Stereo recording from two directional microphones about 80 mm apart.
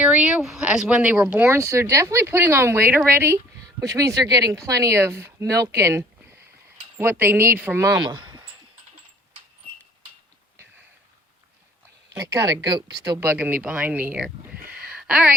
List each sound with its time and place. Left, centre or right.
0.0 s speech: centre
1.5 s speech: right
3.8 s speech: right
5.4 s speech: right
7.9 s a sound: right
12.1 s speech: right
13.1 s speech: centre
14.3 s a sound: centre